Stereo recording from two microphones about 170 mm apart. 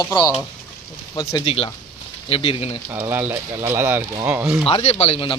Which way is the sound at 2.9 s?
10° right (ahead or behind).